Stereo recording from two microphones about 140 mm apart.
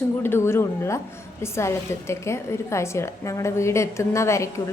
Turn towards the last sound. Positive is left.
turn(degrees=20)  # may be behind; listen again after turning